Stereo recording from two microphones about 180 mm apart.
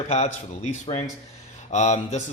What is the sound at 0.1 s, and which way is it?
A man's voice, 40° left (ahead or behind).